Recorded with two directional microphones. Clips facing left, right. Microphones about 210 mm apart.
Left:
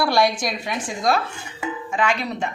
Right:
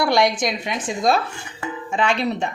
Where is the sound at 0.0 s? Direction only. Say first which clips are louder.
Right 1 dB; 20° right (ahead or behind).